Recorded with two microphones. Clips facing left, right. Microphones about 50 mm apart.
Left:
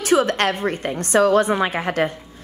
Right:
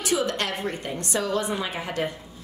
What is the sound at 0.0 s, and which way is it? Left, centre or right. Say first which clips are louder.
A woman's voice: left 8 dB; left.